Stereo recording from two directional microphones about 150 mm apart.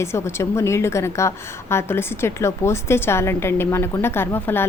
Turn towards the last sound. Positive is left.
turn(degrees=15)  # may be behind; listen again after turning